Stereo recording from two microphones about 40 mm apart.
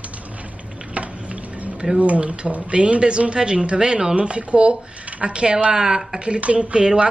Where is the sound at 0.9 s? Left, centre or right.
Right.